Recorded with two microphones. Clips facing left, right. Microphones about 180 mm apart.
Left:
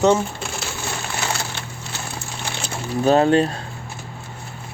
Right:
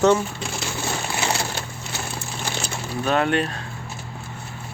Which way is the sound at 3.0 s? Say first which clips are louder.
Left 6 dB; 30° left (ahead or behind).